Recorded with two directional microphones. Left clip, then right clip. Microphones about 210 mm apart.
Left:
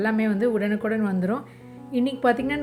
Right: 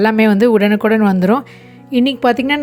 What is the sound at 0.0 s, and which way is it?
A woman's voice, 45° right (ahead or behind).